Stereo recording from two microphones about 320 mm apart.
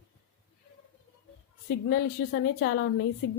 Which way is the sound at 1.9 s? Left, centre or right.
Left.